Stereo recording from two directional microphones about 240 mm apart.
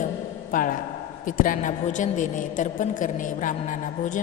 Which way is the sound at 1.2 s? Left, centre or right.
Left.